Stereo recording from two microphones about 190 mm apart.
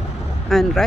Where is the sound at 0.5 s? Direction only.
Centre (ahead or behind).